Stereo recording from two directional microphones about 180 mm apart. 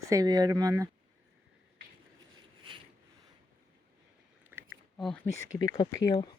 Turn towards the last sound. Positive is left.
turn(degrees=20)  # may be behind; listen again after turning